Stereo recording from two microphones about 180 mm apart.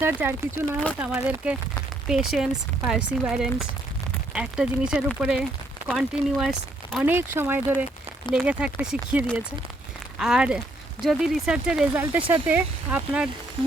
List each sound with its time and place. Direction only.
0.0 s speech: 15° right (ahead or behind)